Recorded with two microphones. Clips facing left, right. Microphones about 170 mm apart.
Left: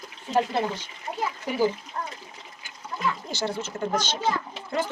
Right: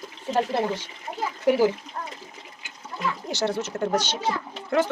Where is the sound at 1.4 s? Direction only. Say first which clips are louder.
Right 5 dB; 75° right (ahead or behind).